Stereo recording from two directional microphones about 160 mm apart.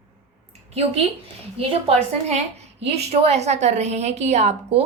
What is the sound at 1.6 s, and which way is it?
A woman's voice, 35° right (ahead or behind).